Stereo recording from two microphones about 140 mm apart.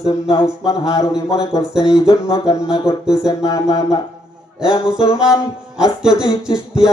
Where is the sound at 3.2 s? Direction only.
25° left (ahead or behind).